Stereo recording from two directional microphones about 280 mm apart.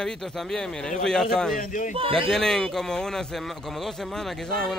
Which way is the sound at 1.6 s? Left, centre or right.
Left.